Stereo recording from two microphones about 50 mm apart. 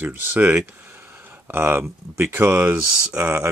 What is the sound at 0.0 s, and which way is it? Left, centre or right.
Speech, right.